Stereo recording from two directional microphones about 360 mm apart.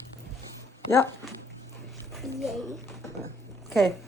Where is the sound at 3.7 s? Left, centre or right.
Centre.